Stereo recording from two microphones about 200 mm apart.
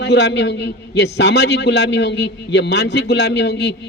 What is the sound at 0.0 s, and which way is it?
A man's voice, 60° left (ahead or behind).